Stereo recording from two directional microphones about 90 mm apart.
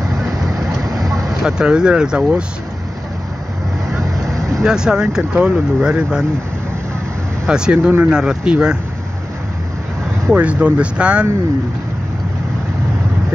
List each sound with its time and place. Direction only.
0.1 s vehicle: 40° right (ahead or behind)
1.4 s speech: 10° right (ahead or behind)
3.9 s vehicle: 40° right (ahead or behind)
4.6 s speech: 10° right (ahead or behind)
7.4 s speech: 10° right (ahead or behind)
10.3 s speech: 15° right (ahead or behind)